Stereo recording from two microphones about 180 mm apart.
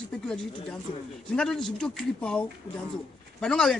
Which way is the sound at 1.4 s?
5° left (ahead or behind).